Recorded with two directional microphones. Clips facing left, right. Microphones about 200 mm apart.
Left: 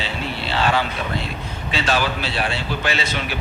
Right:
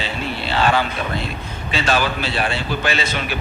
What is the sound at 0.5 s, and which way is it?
A man's voice, 50° right (ahead or behind).